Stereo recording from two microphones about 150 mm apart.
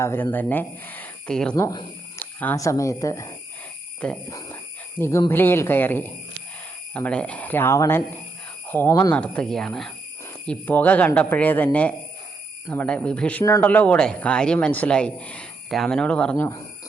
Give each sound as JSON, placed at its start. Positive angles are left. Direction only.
{"t": 0.0, "sound": "a man's voice", "side_deg": 15}
{"t": 1.5, "sound": "speech", "side_deg": 20}
{"t": 4.0, "sound": "a man's voice", "side_deg": 5}
{"t": 4.9, "sound": "a man's voice", "side_deg": 15}
{"t": 13.4, "sound": "speech", "side_deg": 20}
{"t": 13.7, "sound": "a man's voice", "side_deg": 10}